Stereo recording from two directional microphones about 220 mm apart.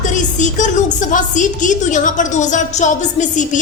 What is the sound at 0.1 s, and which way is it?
A woman's voice, 35° left (ahead or behind).